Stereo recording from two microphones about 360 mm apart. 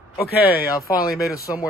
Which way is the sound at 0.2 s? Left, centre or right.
Left.